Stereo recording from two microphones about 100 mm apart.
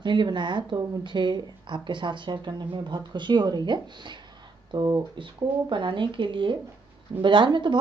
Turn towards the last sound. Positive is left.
turn(degrees=-50)  # may be behind; listen again after turning